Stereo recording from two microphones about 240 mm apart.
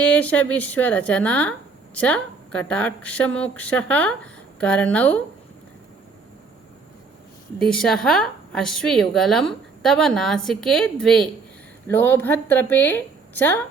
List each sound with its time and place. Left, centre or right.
0.0 s a woman's voice: centre
7.6 s a woman's voice: centre